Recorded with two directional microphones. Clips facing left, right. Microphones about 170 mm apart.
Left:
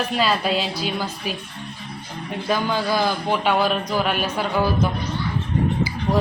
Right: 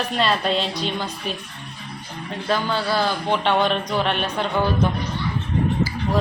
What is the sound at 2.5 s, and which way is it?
Speech, 15° left (ahead or behind).